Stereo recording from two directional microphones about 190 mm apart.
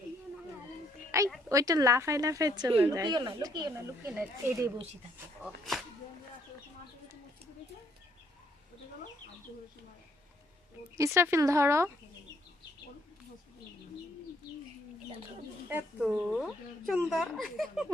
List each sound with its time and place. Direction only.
1.1 s a woman's voice: 15° right (ahead or behind)
5.4 s speech: centre (ahead or behind)
10.9 s speech: 15° right (ahead or behind)
15.7 s speech: 5° right (ahead or behind)